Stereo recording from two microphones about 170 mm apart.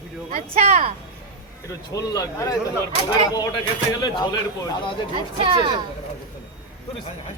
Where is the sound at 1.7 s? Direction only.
20° left (ahead or behind).